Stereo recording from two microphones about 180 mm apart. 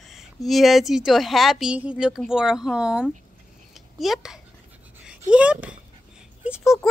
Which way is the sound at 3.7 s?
Centre (ahead or behind).